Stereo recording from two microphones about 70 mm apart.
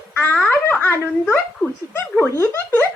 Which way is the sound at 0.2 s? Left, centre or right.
Left.